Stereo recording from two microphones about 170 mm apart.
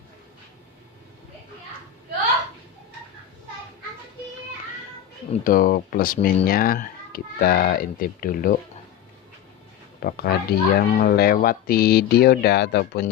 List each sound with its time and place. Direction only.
5.4 s speech: 55° left (ahead or behind)
10.0 s speech: 65° left (ahead or behind)